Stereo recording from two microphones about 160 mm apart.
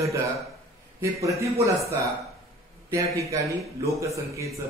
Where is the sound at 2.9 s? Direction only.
20° right (ahead or behind).